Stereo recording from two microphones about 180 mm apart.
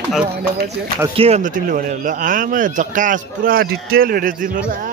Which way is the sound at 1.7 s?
50° right (ahead or behind).